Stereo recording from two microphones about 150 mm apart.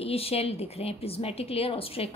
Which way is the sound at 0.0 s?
40° left (ahead or behind).